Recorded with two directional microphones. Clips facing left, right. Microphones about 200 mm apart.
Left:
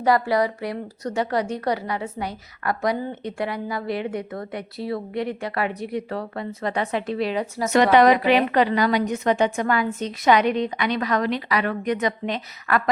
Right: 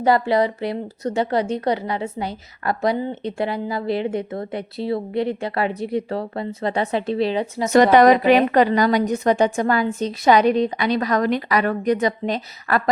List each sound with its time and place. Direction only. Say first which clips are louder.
0.0 s speech: right 2 dB; 25° right (ahead or behind)
7.7 s a woman's voice: right 3 dB; 40° right (ahead or behind)